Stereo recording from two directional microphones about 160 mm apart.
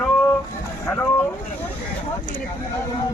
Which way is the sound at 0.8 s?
15° left (ahead or behind).